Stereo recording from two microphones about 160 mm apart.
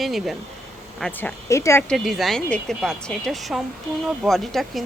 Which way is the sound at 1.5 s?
15° left (ahead or behind).